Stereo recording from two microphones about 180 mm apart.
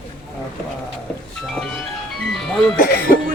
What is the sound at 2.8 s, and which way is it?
Music, 55° left (ahead or behind).